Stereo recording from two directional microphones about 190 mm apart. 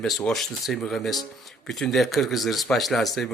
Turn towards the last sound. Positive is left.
turn(degrees=0)  # may be behind; listen again after turning